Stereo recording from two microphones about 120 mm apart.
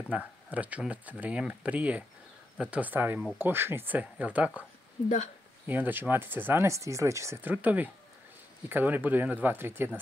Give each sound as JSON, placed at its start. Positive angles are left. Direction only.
{"t": 0.1, "sound": "speech", "side_deg": -10}
{"t": 5.7, "sound": "speech", "side_deg": -15}
{"t": 7.5, "sound": "speech", "side_deg": -15}